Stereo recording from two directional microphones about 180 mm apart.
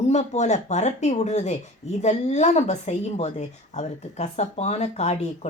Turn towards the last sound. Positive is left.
turn(degrees=40)  # may be behind; listen again after turning